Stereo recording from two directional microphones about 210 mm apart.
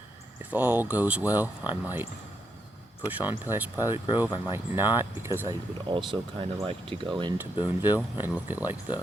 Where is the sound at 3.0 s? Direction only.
10° right (ahead or behind).